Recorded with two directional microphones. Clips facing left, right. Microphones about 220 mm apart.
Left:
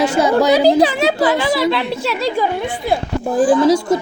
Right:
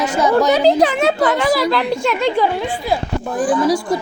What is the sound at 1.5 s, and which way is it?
Speech, centre (ahead or behind).